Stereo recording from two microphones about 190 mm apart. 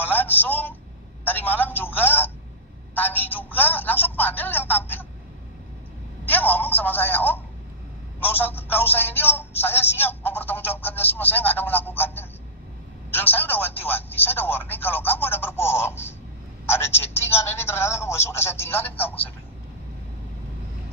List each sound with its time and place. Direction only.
0.0 s a sound: 10° left (ahead or behind)
1.2 s speech: 10° left (ahead or behind)
6.2 s speech: 10° left (ahead or behind)